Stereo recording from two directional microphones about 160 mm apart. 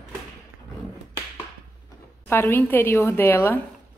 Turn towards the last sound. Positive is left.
turn(degrees=15)  # may be behind; listen again after turning